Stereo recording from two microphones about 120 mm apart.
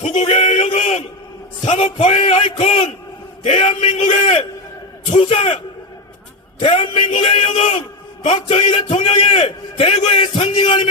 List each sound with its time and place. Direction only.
0.0 s a sound: 65° left (ahead or behind)
1.6 s a man's voice: 65° left (ahead or behind)
6.6 s a man's voice: 50° left (ahead or behind)
8.4 s a man's voice: 50° left (ahead or behind)